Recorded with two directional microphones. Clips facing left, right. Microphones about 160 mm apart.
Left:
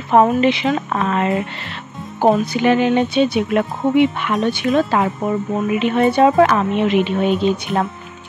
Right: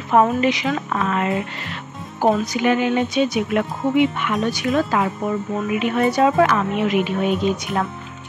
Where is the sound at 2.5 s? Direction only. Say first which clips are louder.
Left 3 dB; 30° left (ahead or behind).